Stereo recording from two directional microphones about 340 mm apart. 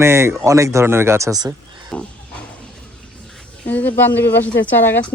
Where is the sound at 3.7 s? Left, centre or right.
Centre.